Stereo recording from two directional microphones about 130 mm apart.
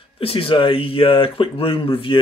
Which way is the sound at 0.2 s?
45° left (ahead or behind).